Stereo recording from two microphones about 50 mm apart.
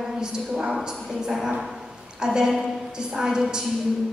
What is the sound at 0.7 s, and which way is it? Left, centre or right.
A woman's voice, centre.